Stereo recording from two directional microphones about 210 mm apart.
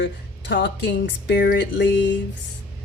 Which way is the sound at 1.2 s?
50° left (ahead or behind).